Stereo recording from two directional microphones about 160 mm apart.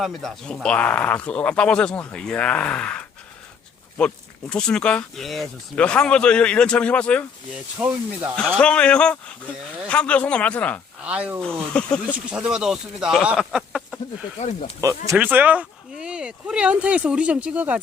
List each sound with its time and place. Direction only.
0.0 s speech: centre (ahead or behind)
7.8 s speech: 10° right (ahead or behind)
8.4 s speech: 5° left (ahead or behind)
11.0 s speech: 5° right (ahead or behind)
11.4 s speech: 5° left (ahead or behind)
12.1 s speech: 5° right (ahead or behind)
14.8 s speech: 20° right (ahead or behind)